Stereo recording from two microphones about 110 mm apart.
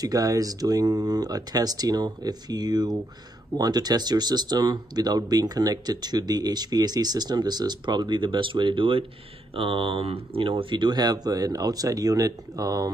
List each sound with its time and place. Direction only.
0.0 s speech: 35° right (ahead or behind)